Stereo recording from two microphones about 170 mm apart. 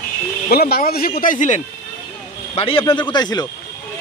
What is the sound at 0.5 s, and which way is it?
Speech, 65° left (ahead or behind).